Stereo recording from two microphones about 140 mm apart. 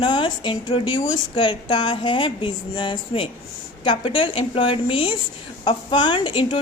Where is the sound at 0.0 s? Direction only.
35° left (ahead or behind).